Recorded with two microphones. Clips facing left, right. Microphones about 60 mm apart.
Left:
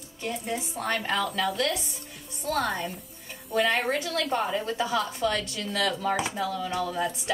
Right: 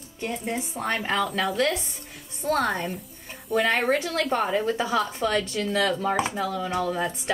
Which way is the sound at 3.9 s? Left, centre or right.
Right.